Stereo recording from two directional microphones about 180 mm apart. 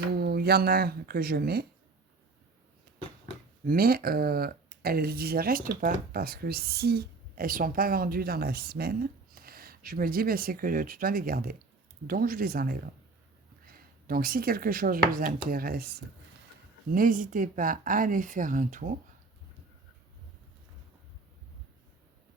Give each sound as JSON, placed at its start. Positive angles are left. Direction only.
{"t": 0.2, "sound": "speech", "side_deg": -60}
{"t": 3.7, "sound": "speech", "side_deg": -55}